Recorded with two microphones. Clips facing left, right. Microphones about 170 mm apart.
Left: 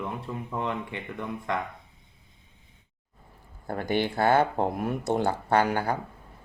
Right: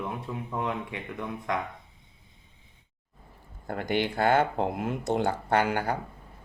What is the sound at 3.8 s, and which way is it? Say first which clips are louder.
Speech: left 1 dB; 15° right (ahead or behind).